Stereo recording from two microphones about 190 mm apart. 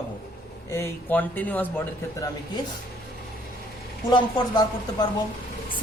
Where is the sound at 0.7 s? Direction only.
10° left (ahead or behind).